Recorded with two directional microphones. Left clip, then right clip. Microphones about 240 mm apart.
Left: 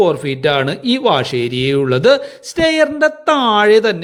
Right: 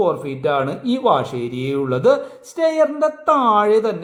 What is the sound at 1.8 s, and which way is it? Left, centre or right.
Speech, left.